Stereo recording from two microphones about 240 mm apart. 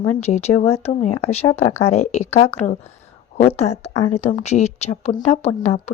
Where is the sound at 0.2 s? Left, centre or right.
Left.